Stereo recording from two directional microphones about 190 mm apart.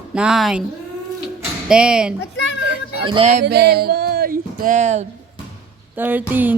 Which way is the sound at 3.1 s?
30° right (ahead or behind).